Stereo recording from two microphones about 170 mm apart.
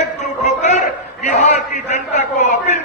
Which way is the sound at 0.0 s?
45° left (ahead or behind).